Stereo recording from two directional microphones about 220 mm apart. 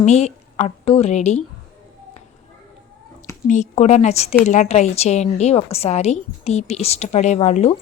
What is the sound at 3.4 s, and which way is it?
A woman's voice, 35° left (ahead or behind).